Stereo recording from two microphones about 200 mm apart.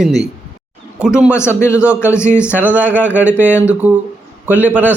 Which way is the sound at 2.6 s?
10° right (ahead or behind).